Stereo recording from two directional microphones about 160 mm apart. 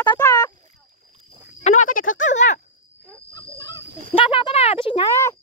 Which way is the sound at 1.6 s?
50° left (ahead or behind).